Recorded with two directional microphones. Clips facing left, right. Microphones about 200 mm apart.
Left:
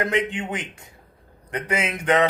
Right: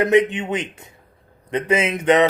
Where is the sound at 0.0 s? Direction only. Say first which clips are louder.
Right 8 dB; 20° right (ahead or behind).